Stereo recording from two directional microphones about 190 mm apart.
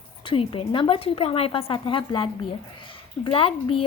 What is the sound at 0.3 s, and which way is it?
A woman's voice, 25° left (ahead or behind).